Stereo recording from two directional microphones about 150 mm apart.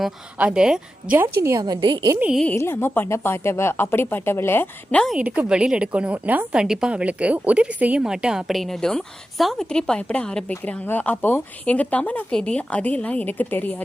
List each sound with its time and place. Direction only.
0.0 s a woman's voice: 10° right (ahead or behind)
1.4 s a woman's voice: 20° right (ahead or behind)
2.1 s a woman's voice: 10° right (ahead or behind)
2.4 s speech: 15° left (ahead or behind)
5.1 s a woman's voice: 10° right (ahead or behind); by 13.8 s 10° left (ahead or behind)